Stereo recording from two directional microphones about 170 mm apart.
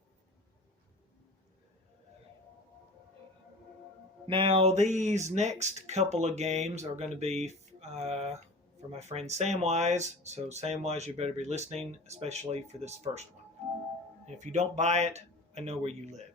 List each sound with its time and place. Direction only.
4.3 s speech: 30° right (ahead or behind)
14.3 s speech: 45° right (ahead or behind)